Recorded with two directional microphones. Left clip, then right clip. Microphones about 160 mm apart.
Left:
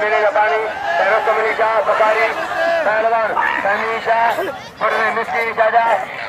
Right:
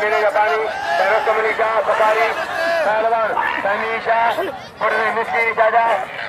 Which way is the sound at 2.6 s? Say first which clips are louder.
Left 2 dB; 85° right.